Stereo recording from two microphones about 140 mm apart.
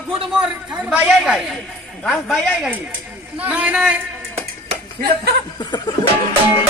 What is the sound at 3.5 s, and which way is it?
Speech, 10° right (ahead or behind).